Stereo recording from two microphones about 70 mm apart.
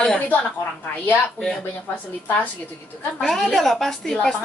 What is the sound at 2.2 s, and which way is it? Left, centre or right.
Speech, left.